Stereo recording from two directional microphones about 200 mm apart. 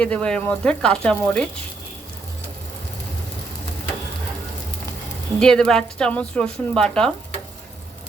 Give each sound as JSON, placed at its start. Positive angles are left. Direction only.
{"t": 0.0, "sound": "speech", "side_deg": 5}
{"t": 5.4, "sound": "speech", "side_deg": 5}